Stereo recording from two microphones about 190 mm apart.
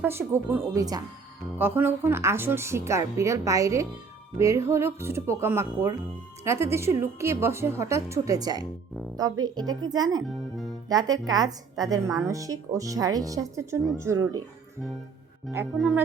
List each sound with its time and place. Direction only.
0.0 s a woman's voice: 15° right (ahead or behind)
15.6 s a woman's voice: 10° right (ahead or behind)